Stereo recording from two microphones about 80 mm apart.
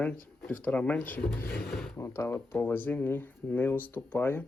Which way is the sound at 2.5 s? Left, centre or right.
Left.